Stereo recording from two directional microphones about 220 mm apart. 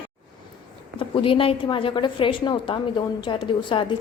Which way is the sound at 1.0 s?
25° left (ahead or behind).